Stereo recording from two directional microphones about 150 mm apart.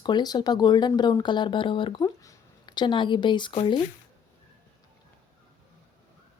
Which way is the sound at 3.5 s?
35° left (ahead or behind).